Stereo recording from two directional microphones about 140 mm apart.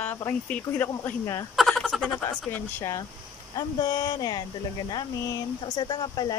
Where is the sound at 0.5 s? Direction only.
10° left (ahead or behind).